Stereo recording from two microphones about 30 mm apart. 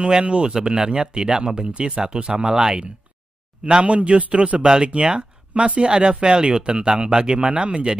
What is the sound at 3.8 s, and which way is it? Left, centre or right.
Speech, right.